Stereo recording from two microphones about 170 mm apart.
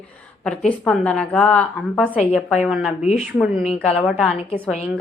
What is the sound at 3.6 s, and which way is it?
Speech, 40° left (ahead or behind).